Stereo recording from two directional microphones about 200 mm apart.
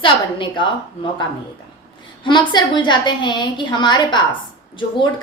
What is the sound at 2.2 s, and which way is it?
A woman's voice, 25° left (ahead or behind).